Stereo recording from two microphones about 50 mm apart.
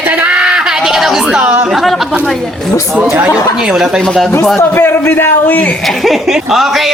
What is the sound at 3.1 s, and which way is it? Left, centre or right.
Speech, right.